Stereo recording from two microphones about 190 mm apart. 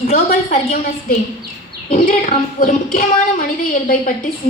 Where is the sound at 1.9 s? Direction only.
40° left (ahead or behind).